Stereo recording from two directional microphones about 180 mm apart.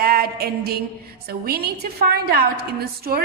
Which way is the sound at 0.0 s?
55° right (ahead or behind).